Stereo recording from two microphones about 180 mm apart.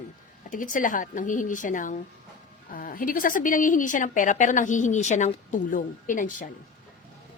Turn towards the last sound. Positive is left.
turn(degrees=45)  # may be behind; listen again after turning